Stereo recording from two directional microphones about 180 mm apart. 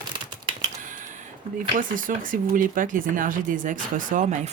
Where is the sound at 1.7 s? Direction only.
50° right (ahead or behind).